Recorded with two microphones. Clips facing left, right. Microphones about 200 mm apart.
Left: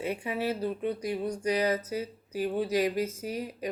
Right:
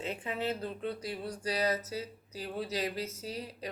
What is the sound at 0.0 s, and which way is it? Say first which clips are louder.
Speech: left 4 dB; 15° left (ahead or behind).